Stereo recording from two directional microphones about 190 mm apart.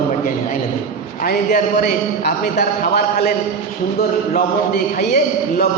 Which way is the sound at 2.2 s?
55° left (ahead or behind).